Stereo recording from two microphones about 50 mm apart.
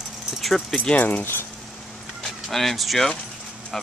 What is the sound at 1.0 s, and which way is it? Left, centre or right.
Speech, left.